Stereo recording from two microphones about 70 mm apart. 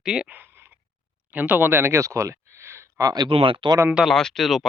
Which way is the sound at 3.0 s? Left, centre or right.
Right.